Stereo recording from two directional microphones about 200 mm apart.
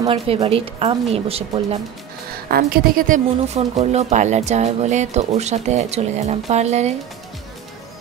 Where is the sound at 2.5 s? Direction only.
50° right (ahead or behind).